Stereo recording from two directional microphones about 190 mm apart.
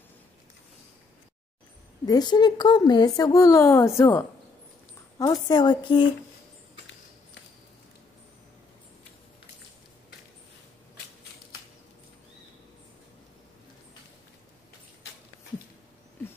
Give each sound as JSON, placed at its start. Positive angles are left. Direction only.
{"t": 2.0, "sound": "a woman's voice", "side_deg": 20}
{"t": 5.2, "sound": "a woman's voice", "side_deg": 20}